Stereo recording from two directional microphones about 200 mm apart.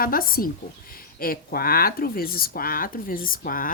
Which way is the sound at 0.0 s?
45° left (ahead or behind).